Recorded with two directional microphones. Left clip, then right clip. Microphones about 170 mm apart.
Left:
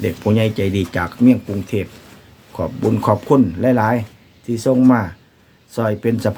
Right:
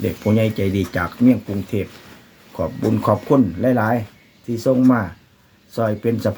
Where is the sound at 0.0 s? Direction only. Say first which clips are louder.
Left 1 dB; 15° left (ahead or behind).